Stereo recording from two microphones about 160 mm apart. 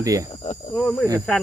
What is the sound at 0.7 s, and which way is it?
Speech, 5° left (ahead or behind).